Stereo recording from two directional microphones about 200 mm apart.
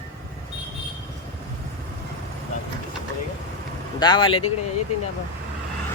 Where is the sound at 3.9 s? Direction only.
20° left (ahead or behind).